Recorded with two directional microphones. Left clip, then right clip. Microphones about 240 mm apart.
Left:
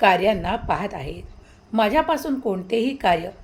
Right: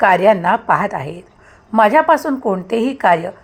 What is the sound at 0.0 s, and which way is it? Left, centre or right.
A woman's voice, centre.